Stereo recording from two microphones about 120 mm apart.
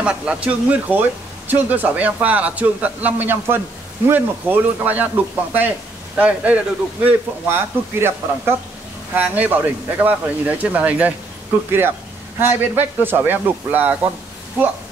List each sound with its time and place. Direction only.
0.0 s a man's voice: 10° right (ahead or behind)
12.4 s a man's voice: 20° right (ahead or behind)